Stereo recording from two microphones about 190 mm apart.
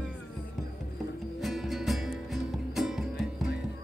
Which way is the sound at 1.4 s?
Centre (ahead or behind).